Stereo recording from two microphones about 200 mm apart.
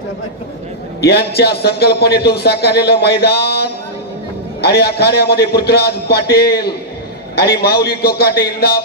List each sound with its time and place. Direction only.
1.0 s a man's voice: 55° left (ahead or behind)